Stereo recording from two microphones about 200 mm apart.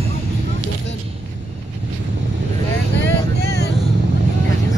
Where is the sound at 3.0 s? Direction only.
60° left (ahead or behind).